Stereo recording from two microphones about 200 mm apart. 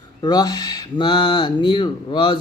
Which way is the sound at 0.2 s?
20° left (ahead or behind).